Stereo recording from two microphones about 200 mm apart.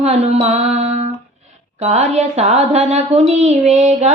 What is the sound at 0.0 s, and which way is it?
Speech, 35° right (ahead or behind).